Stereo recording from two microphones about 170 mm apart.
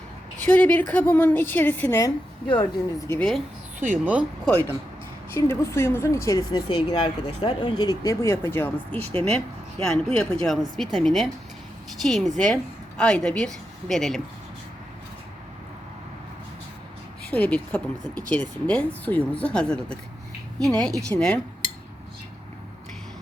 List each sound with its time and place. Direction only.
0.4 s speech: 10° left (ahead or behind)
3.1 s speech: 5° left (ahead or behind)
3.8 s speech: 10° right (ahead or behind)
5.3 s speech: 15° left (ahead or behind)
9.1 s speech: 35° right (ahead or behind)
9.8 s speech: 5° left (ahead or behind)
17.3 s speech: 10° left (ahead or behind)